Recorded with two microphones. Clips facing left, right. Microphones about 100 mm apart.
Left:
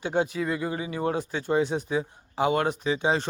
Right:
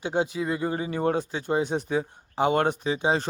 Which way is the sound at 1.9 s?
35° right (ahead or behind).